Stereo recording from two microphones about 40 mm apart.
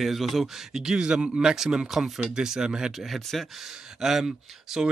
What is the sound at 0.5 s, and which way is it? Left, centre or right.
Speech, centre.